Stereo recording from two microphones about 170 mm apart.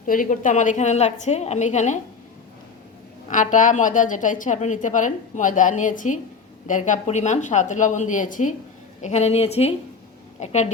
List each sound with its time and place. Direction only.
0.0 s a woman's voice: 50° left (ahead or behind)
3.2 s a woman's voice: 45° left (ahead or behind)